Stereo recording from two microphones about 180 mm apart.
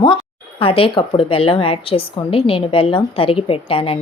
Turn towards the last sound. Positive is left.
turn(degrees=30)  # may be behind; listen again after turning